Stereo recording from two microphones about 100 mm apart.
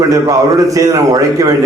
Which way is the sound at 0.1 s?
35° right (ahead or behind).